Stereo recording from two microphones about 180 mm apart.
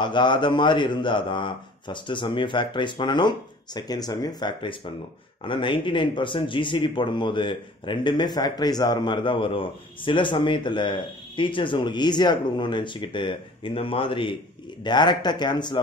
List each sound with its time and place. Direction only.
0.0 s speech: 25° left (ahead or behind)